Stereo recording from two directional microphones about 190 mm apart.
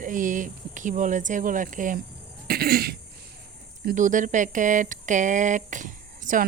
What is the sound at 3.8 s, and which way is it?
Speech, 40° right (ahead or behind).